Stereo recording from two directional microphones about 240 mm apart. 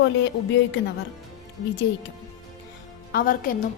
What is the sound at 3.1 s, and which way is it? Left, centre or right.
Speech, left.